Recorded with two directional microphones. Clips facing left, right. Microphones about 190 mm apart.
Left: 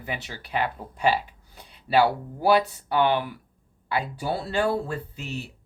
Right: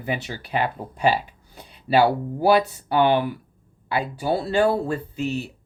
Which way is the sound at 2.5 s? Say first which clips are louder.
Right 3 dB; 15° right (ahead or behind).